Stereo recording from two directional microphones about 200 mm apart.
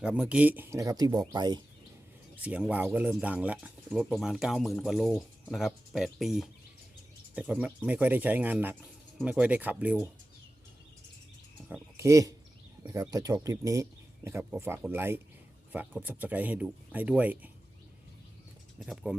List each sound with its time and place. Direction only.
0.0 s speech: 5° right (ahead or behind); by 1.6 s 20° right (ahead or behind)
2.3 s speech: 5° right (ahead or behind)
11.7 s a sound: 15° right (ahead or behind)
12.8 s speech: 15° right (ahead or behind)
18.8 s speech: centre (ahead or behind)